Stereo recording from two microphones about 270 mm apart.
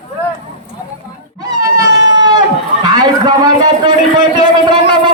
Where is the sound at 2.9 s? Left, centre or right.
Centre.